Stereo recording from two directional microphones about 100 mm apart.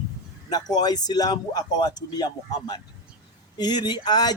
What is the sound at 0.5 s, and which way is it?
A man's voice, 45° left (ahead or behind).